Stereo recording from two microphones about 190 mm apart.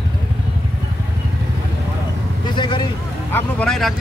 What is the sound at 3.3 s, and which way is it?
Speech, 5° left (ahead or behind).